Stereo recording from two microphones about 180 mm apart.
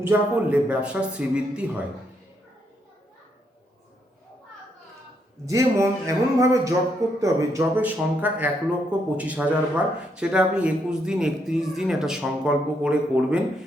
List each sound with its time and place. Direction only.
0.0 s speech: 10° right (ahead or behind)
5.5 s speech: 15° right (ahead or behind)